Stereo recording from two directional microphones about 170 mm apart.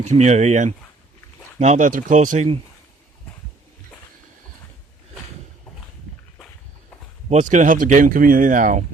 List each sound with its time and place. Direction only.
0.0 s speech: 45° right (ahead or behind)
7.3 s speech: 45° right (ahead or behind)